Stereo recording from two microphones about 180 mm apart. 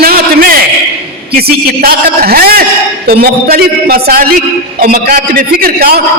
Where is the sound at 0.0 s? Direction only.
55° right (ahead or behind).